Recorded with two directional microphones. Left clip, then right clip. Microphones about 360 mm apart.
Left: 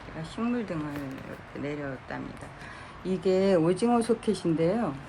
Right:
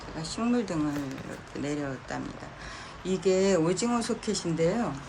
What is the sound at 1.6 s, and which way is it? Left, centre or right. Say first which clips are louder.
Speech: right 1 dB; centre.